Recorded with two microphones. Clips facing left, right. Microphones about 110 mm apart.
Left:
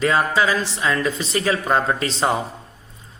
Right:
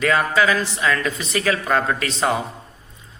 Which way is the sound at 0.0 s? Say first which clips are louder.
Even; 30° left (ahead or behind).